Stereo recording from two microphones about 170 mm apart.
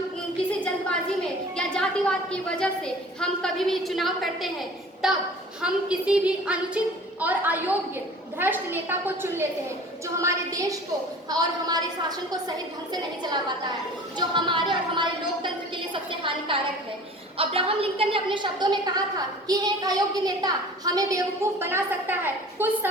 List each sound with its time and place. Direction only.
1.5 s a woman's voice: 5° left (ahead or behind); by 22.9 s 10° right (ahead or behind)